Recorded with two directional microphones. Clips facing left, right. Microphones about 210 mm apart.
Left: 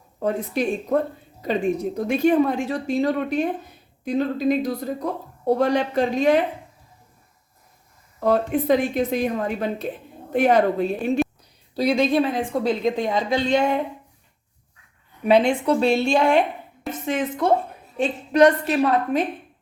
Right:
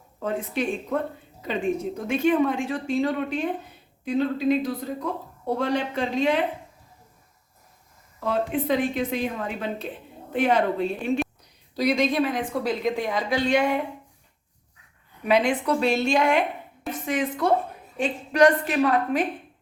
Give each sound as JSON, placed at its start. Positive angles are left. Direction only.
{"t": 0.2, "sound": "speech", "side_deg": 40}
{"t": 8.2, "sound": "speech", "side_deg": 40}
{"t": 11.7, "sound": "speech", "side_deg": 30}
{"t": 15.3, "sound": "a woman's voice", "side_deg": 30}